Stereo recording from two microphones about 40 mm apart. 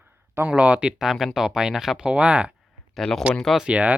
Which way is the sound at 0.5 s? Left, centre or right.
Right.